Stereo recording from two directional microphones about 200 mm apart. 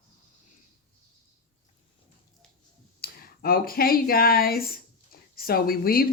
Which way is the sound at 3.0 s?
50° left (ahead or behind).